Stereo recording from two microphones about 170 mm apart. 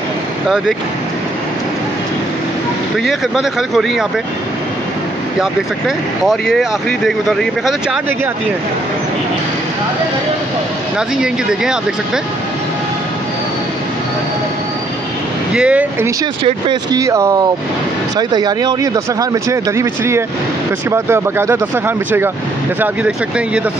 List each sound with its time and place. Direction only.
3.0 s speech: centre (ahead or behind)
5.4 s speech: 5° right (ahead or behind)
11.0 s speech: 5° right (ahead or behind)
15.5 s speech: 5° right (ahead or behind)
16.4 s speech: 30° right (ahead or behind)
17.0 s speech: 20° right (ahead or behind)